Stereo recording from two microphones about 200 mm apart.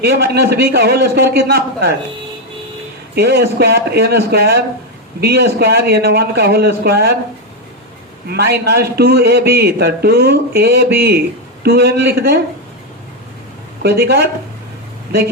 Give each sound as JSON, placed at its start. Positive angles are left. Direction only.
{"t": 0.0, "sound": "a man's voice", "side_deg": -55}
{"t": 3.2, "sound": "a man's voice", "side_deg": -55}
{"t": 8.3, "sound": "a man's voice", "side_deg": -55}
{"t": 13.8, "sound": "a man's voice", "side_deg": -55}